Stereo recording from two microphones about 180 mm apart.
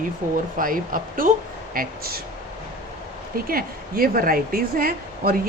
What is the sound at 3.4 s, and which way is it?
Speech, 55° right (ahead or behind).